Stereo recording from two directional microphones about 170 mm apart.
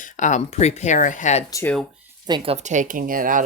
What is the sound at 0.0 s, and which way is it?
Speech, 45° left (ahead or behind).